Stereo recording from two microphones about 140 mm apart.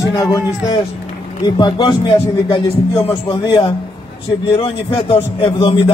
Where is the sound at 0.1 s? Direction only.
25° left (ahead or behind).